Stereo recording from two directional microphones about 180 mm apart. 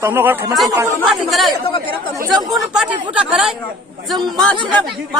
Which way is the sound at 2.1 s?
15° right (ahead or behind).